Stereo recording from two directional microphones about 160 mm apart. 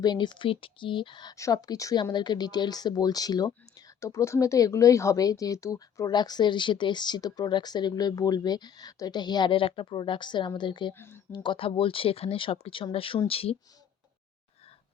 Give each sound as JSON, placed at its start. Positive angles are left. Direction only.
{"t": 0.0, "sound": "speech", "side_deg": 25}
{"t": 10.9, "sound": "speech", "side_deg": 15}
{"t": 11.4, "sound": "speech", "side_deg": 35}